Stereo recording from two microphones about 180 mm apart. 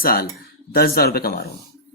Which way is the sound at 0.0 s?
55° left (ahead or behind).